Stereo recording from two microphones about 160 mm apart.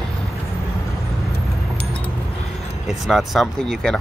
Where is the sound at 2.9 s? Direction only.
Centre (ahead or behind).